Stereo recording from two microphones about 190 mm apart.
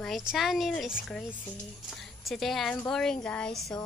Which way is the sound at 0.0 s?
Centre (ahead or behind).